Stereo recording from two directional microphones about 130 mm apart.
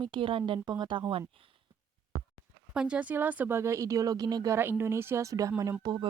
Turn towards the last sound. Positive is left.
turn(degrees=-30)  # may be behind; listen again after turning